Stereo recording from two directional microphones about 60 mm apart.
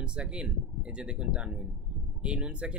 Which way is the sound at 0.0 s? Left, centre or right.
Centre.